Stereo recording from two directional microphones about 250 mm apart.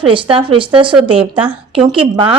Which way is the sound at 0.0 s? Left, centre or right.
Right.